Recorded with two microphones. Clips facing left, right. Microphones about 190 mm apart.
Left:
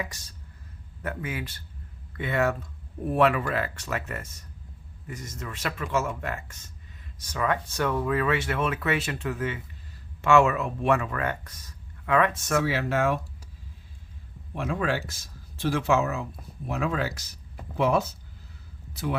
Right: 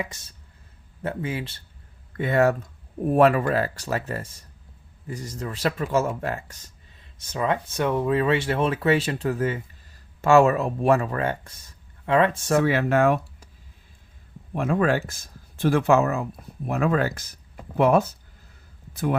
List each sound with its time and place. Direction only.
0.0 s speech: 25° right (ahead or behind)
2.1 s speech: 40° right (ahead or behind)
7.2 s speech: 25° right (ahead or behind)
12.6 s speech: 55° right (ahead or behind)
14.5 s speech: 50° right (ahead or behind)